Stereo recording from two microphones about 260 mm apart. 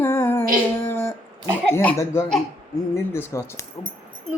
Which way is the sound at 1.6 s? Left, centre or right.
Centre.